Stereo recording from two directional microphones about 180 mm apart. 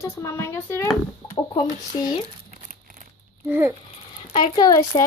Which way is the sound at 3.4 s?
10° right (ahead or behind).